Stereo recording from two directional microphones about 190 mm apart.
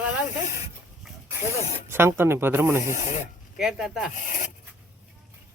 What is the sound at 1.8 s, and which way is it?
Speech, 10° right (ahead or behind).